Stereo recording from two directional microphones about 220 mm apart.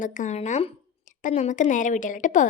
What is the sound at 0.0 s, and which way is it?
A woman's voice, 35° left (ahead or behind).